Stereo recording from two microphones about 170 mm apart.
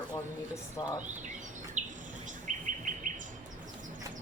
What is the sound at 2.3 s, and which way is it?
Bird, 50° right (ahead or behind).